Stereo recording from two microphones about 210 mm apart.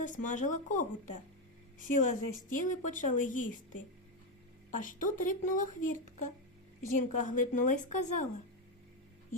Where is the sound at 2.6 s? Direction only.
40° left (ahead or behind).